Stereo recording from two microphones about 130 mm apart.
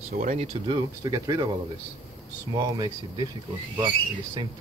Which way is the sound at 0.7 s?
30° right (ahead or behind).